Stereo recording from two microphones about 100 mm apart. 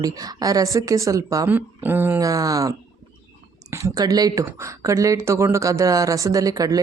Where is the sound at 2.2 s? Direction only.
35° right (ahead or behind).